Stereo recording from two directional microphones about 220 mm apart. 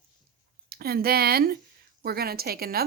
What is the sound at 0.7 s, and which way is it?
A woman's voice, 45° right (ahead or behind).